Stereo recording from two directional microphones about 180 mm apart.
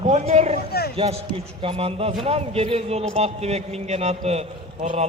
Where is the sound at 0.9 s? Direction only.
35° right (ahead or behind).